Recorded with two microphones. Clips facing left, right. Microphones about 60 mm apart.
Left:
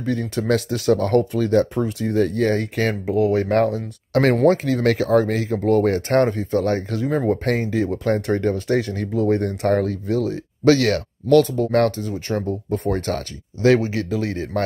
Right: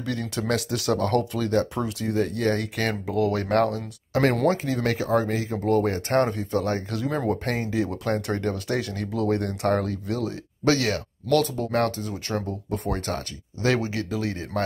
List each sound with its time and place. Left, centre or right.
0.0 s speech: left
2.0 s speech: left
4.6 s speech: left
12.1 s speech: left